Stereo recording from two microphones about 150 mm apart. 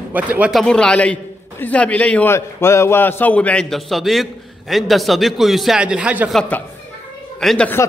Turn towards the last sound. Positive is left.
turn(degrees=0)  # may be behind; listen again after turning